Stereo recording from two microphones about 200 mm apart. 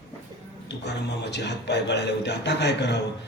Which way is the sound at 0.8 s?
60° left (ahead or behind).